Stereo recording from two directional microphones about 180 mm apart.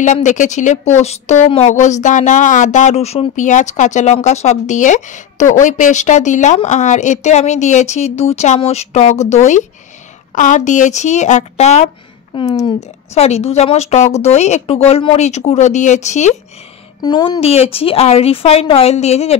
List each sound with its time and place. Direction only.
0.0 s speech: 40° left (ahead or behind)
12.4 s a woman's voice: 25° left (ahead or behind)
12.8 s speech: 35° left (ahead or behind)
17.0 s speech: 25° left (ahead or behind)